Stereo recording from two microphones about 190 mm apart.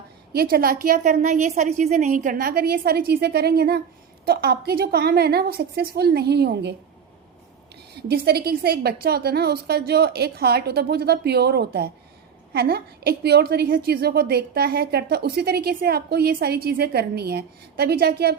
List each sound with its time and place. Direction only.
0.3 s a woman's voice: 55° right (ahead or behind)
8.0 s a woman's voice: 55° right (ahead or behind)